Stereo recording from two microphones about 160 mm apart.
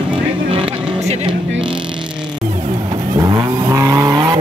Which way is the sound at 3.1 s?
25° right (ahead or behind).